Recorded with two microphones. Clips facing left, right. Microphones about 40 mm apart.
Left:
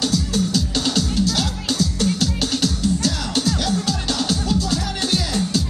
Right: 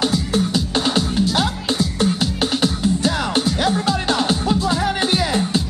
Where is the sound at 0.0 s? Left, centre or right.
Right.